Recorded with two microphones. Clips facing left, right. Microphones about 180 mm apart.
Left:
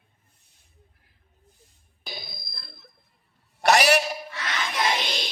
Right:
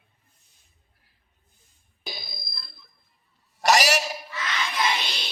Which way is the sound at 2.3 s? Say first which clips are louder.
Even; 55° left (ahead or behind).